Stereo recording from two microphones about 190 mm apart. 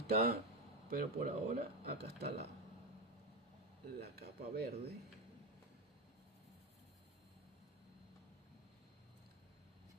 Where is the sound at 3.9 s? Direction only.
55° right (ahead or behind).